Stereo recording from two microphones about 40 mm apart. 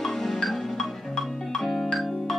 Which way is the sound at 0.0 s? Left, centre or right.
Centre.